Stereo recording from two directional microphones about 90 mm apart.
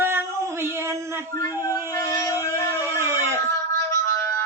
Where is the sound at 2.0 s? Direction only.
35° left (ahead or behind).